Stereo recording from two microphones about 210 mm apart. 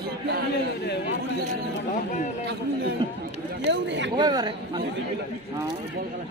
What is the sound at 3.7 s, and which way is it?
Speech, 55° right (ahead or behind).